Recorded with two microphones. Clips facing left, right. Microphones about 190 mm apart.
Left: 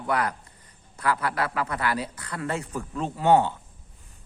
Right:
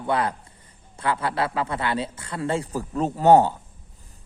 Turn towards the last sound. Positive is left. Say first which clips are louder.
# right 4 dB
turn(degrees=-40)  # may be behind; listen again after turning